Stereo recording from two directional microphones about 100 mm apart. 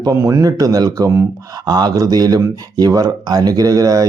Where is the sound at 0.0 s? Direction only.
35° right (ahead or behind).